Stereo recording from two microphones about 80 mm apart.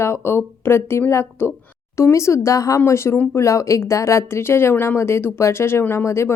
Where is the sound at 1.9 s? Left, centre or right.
Left.